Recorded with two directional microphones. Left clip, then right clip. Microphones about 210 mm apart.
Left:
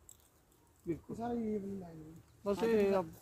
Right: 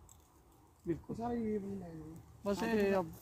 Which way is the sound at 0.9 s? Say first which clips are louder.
Right 1 dB; 30° right (ahead or behind).